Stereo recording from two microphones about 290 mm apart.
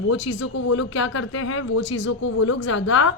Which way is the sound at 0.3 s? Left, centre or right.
Left.